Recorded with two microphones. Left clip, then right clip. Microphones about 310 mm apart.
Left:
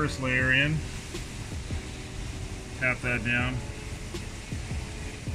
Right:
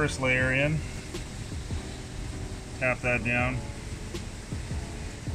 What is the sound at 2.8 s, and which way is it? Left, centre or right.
Speech, centre.